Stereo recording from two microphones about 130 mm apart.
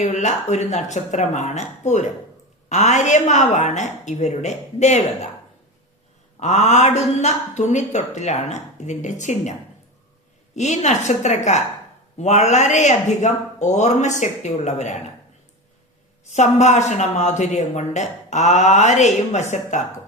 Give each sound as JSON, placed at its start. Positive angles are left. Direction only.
{"t": 0.0, "sound": "speech", "side_deg": 65}
{"t": 6.4, "sound": "speech", "side_deg": 60}
{"t": 16.3, "sound": "speech", "side_deg": 60}